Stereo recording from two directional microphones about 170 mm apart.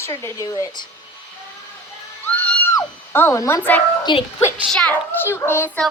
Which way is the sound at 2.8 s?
15° left (ahead or behind).